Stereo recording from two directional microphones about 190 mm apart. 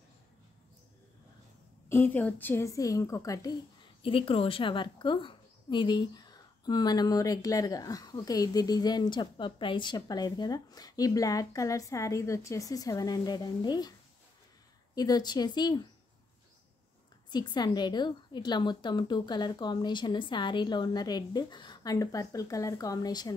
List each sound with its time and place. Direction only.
1.9 s a woman's voice: 10° left (ahead or behind)
4.0 s a woman's voice: 30° left (ahead or behind)
15.0 s a woman's voice: 20° left (ahead or behind)
17.3 s a woman's voice: 20° left (ahead or behind)